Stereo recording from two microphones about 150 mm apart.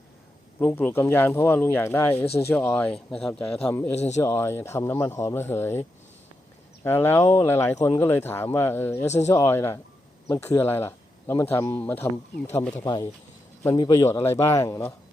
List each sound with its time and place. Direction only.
0.6 s speech: 15° left (ahead or behind)
2.2 s speech: 40° left (ahead or behind)
2.5 s speech: 10° left (ahead or behind)
3.7 s speech: 15° left (ahead or behind)
3.9 s speech: 45° left (ahead or behind)
4.2 s speech: 20° left (ahead or behind)
6.8 s speech: 15° left (ahead or behind)
9.0 s speech: 50° left (ahead or behind)
9.3 s speech: 20° left (ahead or behind)
13.7 s a man's voice: 25° left (ahead or behind)